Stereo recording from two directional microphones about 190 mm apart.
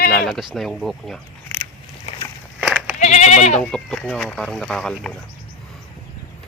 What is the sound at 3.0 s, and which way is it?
Goat, 40° left (ahead or behind).